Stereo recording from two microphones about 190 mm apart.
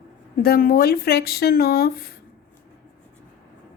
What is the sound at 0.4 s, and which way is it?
Speech, 55° left (ahead or behind).